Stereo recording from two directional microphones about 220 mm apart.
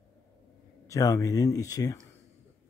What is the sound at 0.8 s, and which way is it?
Speech, 15° left (ahead or behind).